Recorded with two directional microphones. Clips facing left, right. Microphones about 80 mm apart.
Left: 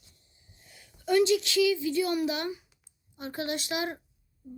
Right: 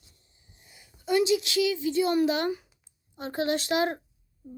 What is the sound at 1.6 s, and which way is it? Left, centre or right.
A child's voice, right.